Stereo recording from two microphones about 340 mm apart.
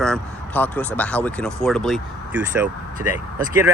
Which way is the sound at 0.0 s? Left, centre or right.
Centre.